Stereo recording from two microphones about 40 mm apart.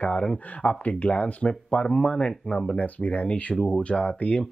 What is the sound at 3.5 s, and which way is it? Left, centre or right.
Speech, centre.